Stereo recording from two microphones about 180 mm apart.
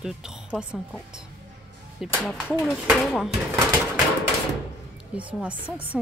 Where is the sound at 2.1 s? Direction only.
5° left (ahead or behind).